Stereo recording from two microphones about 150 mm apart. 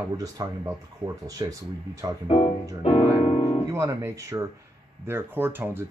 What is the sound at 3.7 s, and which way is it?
Speech, 20° right (ahead or behind).